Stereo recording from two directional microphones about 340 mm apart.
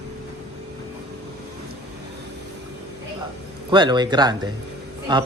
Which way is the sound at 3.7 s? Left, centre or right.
Centre.